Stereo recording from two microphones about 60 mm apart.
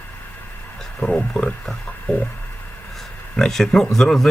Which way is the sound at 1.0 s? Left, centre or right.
Centre.